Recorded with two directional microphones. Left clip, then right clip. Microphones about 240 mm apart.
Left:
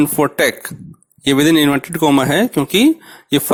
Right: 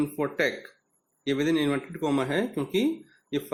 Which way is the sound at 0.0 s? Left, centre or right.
Left.